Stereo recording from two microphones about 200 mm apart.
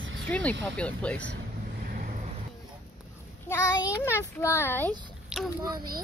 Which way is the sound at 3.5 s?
10° left (ahead or behind).